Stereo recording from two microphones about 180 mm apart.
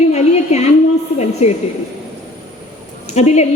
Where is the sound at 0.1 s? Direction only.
35° left (ahead or behind).